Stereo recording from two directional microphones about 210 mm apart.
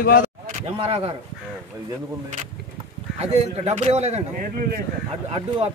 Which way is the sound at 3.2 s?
30° right (ahead or behind).